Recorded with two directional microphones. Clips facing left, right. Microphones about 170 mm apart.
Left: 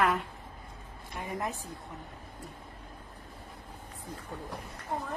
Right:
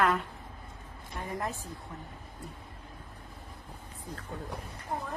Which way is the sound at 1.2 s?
20° left (ahead or behind).